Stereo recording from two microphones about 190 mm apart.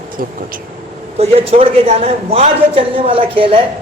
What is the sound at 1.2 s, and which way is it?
A man's voice, 30° right (ahead or behind).